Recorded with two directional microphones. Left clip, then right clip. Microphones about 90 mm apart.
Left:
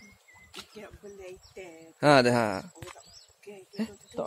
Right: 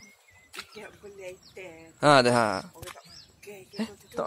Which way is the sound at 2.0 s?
35° left (ahead or behind).